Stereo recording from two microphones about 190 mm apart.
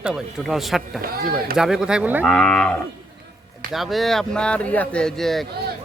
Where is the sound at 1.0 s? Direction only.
50° right (ahead or behind).